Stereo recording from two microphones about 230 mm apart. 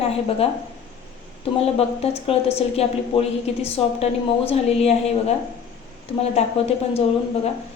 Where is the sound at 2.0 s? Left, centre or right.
Left.